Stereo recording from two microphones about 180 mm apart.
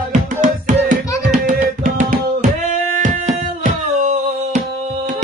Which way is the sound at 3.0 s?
45° right (ahead or behind).